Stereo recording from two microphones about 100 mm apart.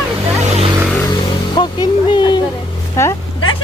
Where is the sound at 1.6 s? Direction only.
50° left (ahead or behind).